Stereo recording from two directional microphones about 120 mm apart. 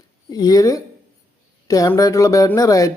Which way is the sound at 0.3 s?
30° left (ahead or behind).